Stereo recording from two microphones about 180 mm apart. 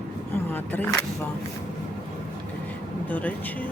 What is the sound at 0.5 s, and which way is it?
Speech, 10° left (ahead or behind).